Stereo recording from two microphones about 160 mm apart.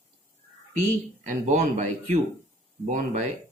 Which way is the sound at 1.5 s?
50° right (ahead or behind).